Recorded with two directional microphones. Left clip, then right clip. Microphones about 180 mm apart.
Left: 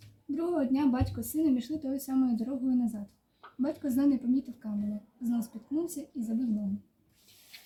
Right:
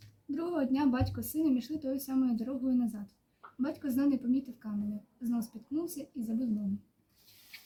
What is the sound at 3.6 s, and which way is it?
A woman's voice, centre (ahead or behind).